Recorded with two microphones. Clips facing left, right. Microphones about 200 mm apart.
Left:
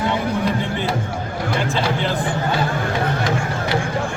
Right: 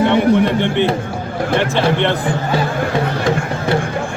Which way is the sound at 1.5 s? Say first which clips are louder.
Right 7 dB; 70° right (ahead or behind).